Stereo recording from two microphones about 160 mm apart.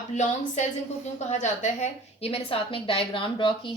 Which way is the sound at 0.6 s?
45° left (ahead or behind).